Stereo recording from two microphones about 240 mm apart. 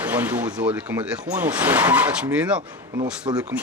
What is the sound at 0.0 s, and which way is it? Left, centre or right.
Speech, centre.